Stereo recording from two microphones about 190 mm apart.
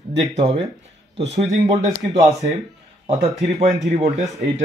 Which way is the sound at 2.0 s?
20° right (ahead or behind).